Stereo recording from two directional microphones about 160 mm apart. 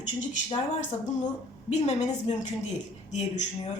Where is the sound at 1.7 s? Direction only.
45° left (ahead or behind).